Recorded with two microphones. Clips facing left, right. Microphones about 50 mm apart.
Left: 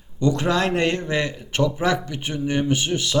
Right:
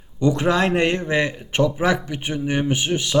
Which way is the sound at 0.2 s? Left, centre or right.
Centre.